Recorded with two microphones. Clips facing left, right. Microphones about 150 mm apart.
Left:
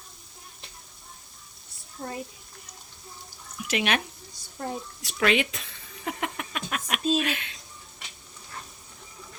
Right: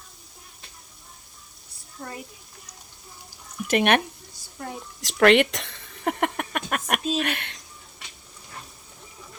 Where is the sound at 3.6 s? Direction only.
55° right (ahead or behind).